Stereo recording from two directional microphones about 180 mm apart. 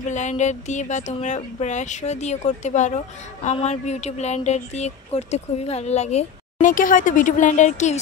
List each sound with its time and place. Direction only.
0.1 s speech: 40° left (ahead or behind)